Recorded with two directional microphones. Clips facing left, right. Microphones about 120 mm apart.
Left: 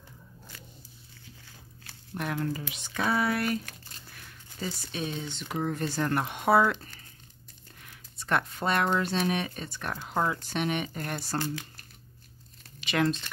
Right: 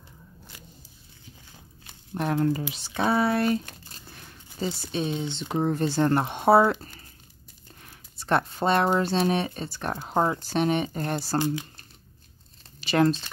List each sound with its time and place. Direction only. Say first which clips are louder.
1.9 s speech: right 6 dB; 30° right (ahead or behind)
2.7 s crumpling: right 4 dB; 30° right (ahead or behind)
4.9 s speech: right 7 dB; 30° right (ahead or behind)
7.8 s a sound: right 1 dB; 35° right (ahead or behind)
9.0 s speech: right 5 dB; 30° right (ahead or behind)
11.3 s speech: right 6 dB; 20° right (ahead or behind)
12.8 s speech: right 5 dB; 35° right (ahead or behind)